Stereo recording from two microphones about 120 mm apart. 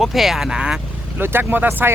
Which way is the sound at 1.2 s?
20° right (ahead or behind).